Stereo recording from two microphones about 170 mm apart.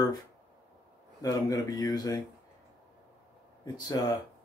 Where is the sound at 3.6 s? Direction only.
20° left (ahead or behind).